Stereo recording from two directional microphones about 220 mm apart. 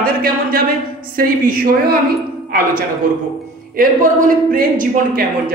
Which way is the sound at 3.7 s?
40° right (ahead or behind).